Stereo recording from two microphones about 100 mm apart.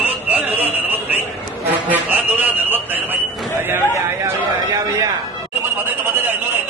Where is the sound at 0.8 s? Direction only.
20° right (ahead or behind).